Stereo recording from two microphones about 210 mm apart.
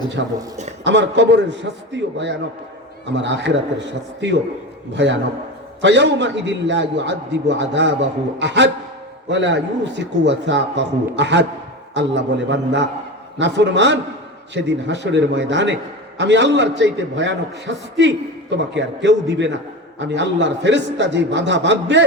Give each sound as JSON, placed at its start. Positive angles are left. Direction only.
{"t": 0.2, "sound": "a man's voice", "side_deg": -60}
{"t": 5.8, "sound": "a man's voice", "side_deg": -55}